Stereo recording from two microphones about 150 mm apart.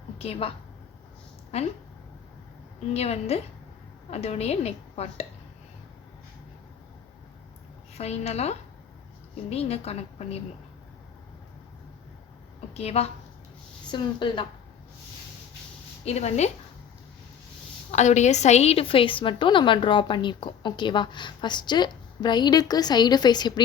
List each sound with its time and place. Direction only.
0.2 s a woman's voice: 40° left (ahead or behind)
1.5 s a woman's voice: 45° left (ahead or behind)
2.9 s a woman's voice: 45° left (ahead or behind)
7.9 s a woman's voice: 45° left (ahead or behind)
12.7 s a woman's voice: 45° left (ahead or behind)
13.9 s a woman's voice: 30° left (ahead or behind)
16.0 s a woman's voice: 45° left (ahead or behind)
17.9 s a woman's voice: 50° left (ahead or behind); by 23.6 s 30° left (ahead or behind)